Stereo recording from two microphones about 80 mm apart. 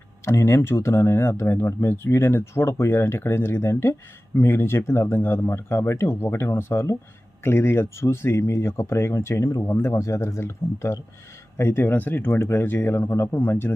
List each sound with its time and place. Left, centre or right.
0.3 s speech: left